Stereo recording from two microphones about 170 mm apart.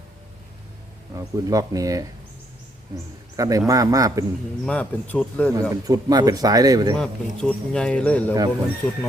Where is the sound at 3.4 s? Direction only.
20° right (ahead or behind).